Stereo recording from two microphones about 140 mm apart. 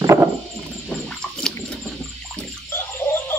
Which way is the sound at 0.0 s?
20° right (ahead or behind).